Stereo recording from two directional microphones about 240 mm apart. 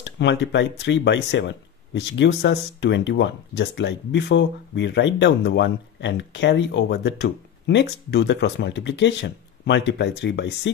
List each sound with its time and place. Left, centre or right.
0.0 s speech: left